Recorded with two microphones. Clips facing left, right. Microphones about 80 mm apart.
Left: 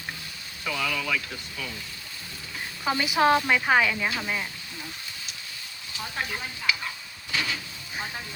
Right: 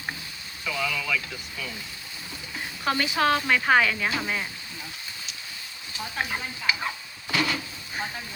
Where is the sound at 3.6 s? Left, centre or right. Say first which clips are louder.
Right 1 dB; centre.